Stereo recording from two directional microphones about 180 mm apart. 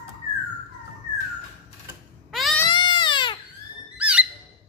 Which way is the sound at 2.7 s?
25° left (ahead or behind).